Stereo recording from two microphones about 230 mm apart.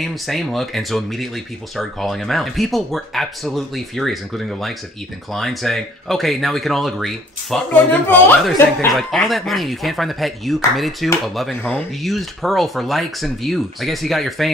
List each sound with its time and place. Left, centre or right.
0.0 s speech: centre